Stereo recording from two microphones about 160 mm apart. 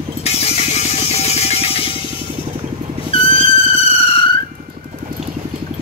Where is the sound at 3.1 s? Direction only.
35° left (ahead or behind).